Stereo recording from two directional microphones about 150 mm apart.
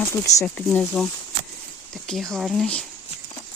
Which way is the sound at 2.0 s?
Centre (ahead or behind).